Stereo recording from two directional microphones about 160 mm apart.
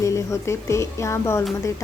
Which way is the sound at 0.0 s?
20° left (ahead or behind).